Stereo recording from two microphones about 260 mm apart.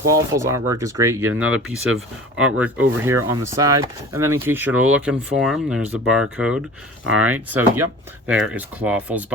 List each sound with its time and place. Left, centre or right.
0.1 s speech: centre
7.0 s speech: right
7.3 s speech: centre